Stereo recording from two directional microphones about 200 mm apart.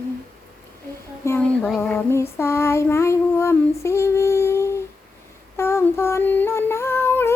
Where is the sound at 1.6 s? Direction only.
Centre (ahead or behind).